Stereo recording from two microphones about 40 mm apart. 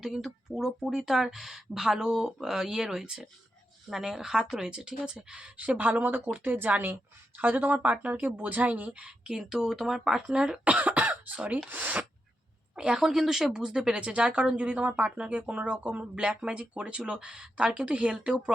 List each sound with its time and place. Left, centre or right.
0.0 s a woman's voice: centre
5.5 s speech: right
6.1 s speech: right
9.0 s a woman's voice: right
9.3 s a woman's voice: centre
10.6 s speech: right
12.7 s a woman's voice: centre; by 16.0 s right
16.1 s a woman's voice: right